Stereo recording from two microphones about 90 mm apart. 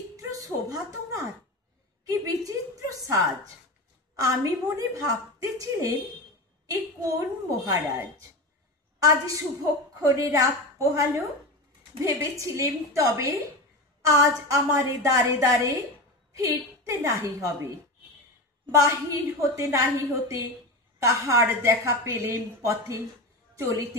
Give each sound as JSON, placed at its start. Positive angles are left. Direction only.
{"t": 0.1, "sound": "a sound", "side_deg": -40}
{"t": 2.0, "sound": "a woman's voice", "side_deg": -40}
{"t": 18.8, "sound": "a woman's voice", "side_deg": -35}